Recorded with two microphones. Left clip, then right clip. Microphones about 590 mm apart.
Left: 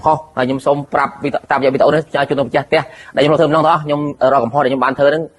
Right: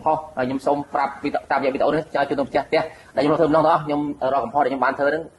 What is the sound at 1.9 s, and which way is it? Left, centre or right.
A man's voice, left.